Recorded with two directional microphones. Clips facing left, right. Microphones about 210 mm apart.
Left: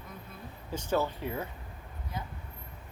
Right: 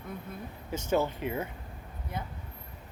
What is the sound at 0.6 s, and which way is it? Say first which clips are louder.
Speech: right 2 dB; 20° right (ahead or behind).